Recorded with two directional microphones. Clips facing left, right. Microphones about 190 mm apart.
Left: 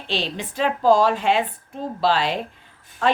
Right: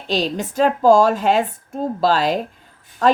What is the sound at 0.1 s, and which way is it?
A woman's voice, 40° right (ahead or behind).